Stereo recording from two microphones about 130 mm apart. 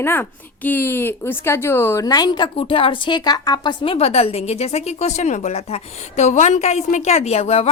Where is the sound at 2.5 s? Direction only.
45° left (ahead or behind).